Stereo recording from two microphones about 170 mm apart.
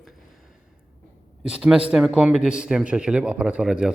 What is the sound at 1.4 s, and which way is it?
A man's voice, 5° right (ahead or behind).